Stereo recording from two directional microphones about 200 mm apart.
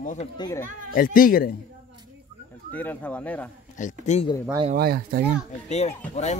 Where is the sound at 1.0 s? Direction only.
45° left (ahead or behind).